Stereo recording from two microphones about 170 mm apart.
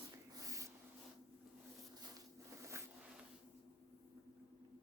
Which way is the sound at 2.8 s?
15° right (ahead or behind).